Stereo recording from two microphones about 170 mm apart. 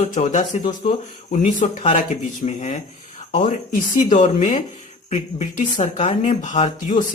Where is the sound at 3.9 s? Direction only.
45° left (ahead or behind).